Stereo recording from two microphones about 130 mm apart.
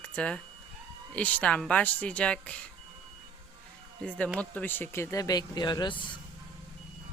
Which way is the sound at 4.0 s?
10° left (ahead or behind).